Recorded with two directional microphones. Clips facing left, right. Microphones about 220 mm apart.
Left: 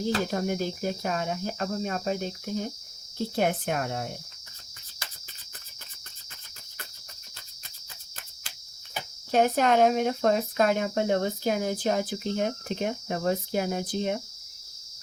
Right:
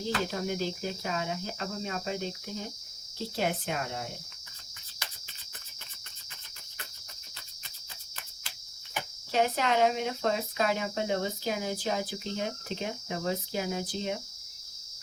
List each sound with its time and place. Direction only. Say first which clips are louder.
0.3 s speech: left 4 dB; 50° left (ahead or behind)
9.3 s speech: left 5 dB; 50° left (ahead or behind)